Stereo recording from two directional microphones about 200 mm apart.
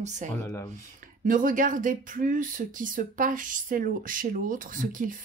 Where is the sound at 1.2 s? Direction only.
40° right (ahead or behind).